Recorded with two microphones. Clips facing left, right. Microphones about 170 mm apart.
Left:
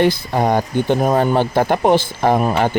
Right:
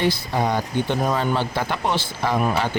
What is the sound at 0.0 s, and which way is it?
Speech, 50° left (ahead or behind).